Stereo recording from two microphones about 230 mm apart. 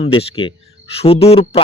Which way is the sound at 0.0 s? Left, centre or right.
Left.